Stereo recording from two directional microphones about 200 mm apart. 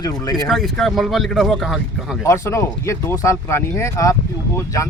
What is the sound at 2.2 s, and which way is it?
Speech, 15° left (ahead or behind).